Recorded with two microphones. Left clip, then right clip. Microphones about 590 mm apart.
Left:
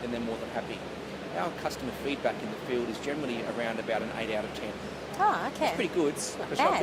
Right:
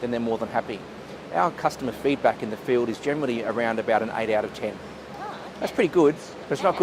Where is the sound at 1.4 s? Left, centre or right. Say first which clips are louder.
Right 10 dB; right.